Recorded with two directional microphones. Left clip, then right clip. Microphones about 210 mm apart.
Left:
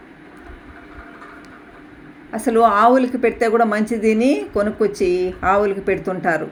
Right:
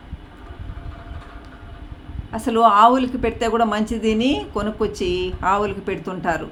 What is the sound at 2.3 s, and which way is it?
Speech, centre (ahead or behind).